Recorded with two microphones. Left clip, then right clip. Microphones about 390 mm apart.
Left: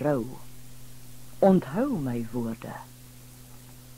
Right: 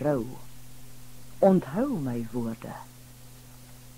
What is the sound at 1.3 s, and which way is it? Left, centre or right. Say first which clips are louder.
Speech: even; left.